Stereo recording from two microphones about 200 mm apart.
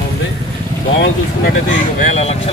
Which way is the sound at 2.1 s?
30° left (ahead or behind).